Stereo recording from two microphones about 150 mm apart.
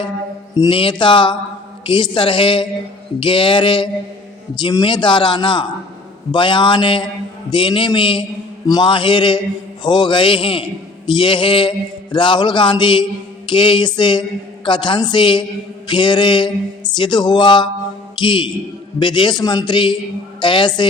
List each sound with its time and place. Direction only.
0.6 s a woman's voice: 35° left (ahead or behind)